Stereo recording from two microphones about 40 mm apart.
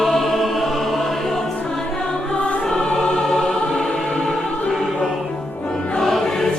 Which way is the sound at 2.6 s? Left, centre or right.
Centre.